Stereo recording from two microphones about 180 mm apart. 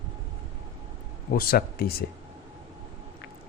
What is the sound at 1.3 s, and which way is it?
Speech, 55° left (ahead or behind).